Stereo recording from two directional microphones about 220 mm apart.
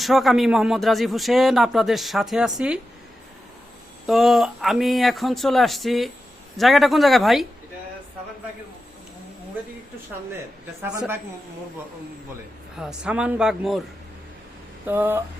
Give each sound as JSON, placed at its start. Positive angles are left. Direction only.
{"t": 0.0, "sound": "speech", "side_deg": 0}
{"t": 4.0, "sound": "speech", "side_deg": 0}
{"t": 12.7, "sound": "speech", "side_deg": -5}
{"t": 14.8, "sound": "speech", "side_deg": -10}